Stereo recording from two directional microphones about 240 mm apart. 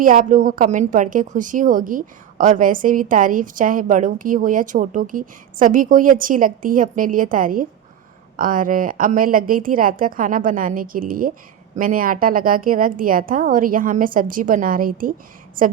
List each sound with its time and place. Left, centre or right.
0.0 s a woman's voice: right